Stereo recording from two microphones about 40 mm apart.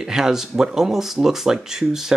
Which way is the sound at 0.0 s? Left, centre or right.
Centre.